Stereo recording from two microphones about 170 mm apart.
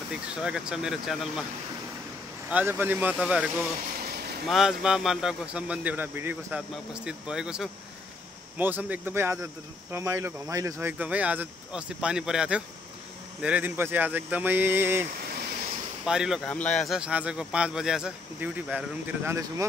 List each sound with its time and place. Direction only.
0.1 s a man's voice: 5° right (ahead or behind)
2.5 s speech: 10° right (ahead or behind)
4.0 s vehicle: 65° right (ahead or behind)
4.5 s a man's voice: centre (ahead or behind)
16.1 s a man's voice: 5° right (ahead or behind)